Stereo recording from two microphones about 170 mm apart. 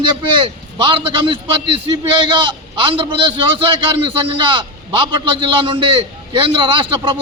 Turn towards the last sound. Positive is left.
turn(degrees=-30)  # may be behind; listen again after turning